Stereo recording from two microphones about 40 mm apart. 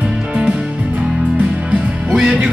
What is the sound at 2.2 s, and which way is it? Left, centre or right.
Music, right.